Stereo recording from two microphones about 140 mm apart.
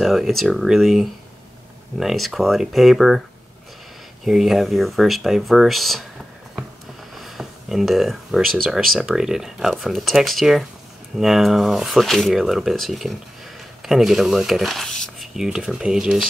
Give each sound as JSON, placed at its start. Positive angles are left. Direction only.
{"t": 0.0, "sound": "speech", "side_deg": 0}
{"t": 4.2, "sound": "speech", "side_deg": 0}
{"t": 7.2, "sound": "speech", "side_deg": 0}